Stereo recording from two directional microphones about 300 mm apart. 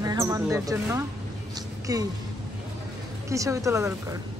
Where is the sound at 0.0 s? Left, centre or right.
Centre.